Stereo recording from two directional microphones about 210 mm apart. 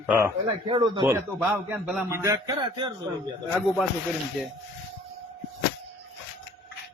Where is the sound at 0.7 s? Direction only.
20° right (ahead or behind).